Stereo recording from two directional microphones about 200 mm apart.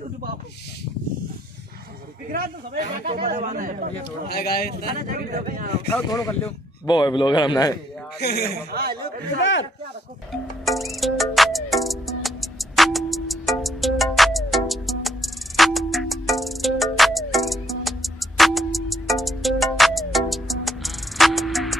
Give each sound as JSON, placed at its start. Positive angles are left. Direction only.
{"t": 2.3, "sound": "a man's voice", "side_deg": -45}
{"t": 4.3, "sound": "speech", "side_deg": 50}
{"t": 5.0, "sound": "speech", "side_deg": -40}
{"t": 6.0, "sound": "speech", "side_deg": 15}
{"t": 8.2, "sound": "speech", "side_deg": 55}
{"t": 9.4, "sound": "speech", "side_deg": 70}
{"t": 10.6, "sound": "music", "side_deg": 0}